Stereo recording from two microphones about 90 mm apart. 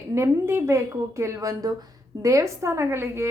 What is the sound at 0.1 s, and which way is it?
A woman's voice, 30° right (ahead or behind).